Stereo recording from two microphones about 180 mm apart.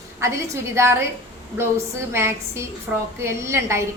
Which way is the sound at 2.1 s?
15° right (ahead or behind).